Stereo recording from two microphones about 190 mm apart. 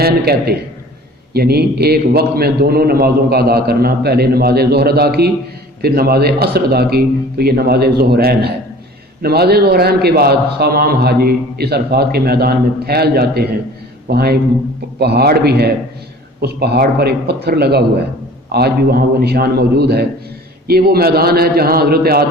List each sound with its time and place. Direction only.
0.0 s a man's voice: 55° right (ahead or behind)